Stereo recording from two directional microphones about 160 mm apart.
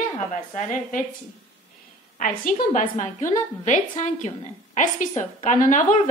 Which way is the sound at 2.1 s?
55° left (ahead or behind).